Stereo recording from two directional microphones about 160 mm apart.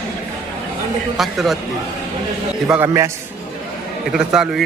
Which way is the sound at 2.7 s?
15° right (ahead or behind).